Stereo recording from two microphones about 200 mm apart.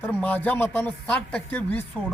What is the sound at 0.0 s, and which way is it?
Speech, 10° left (ahead or behind).